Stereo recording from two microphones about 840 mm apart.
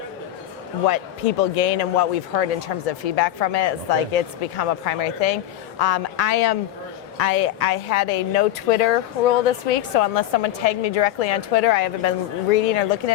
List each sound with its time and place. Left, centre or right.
0.9 s speech: left